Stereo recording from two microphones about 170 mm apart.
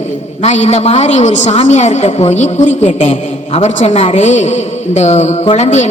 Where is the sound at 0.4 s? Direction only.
45° left (ahead or behind).